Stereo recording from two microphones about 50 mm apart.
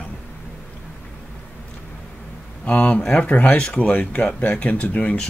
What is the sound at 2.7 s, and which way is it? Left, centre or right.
Speech, left.